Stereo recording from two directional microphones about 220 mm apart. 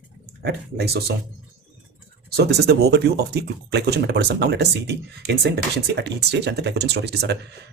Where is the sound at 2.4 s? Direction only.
50° right (ahead or behind).